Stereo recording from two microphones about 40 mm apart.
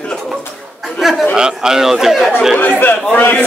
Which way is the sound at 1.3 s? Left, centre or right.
Centre.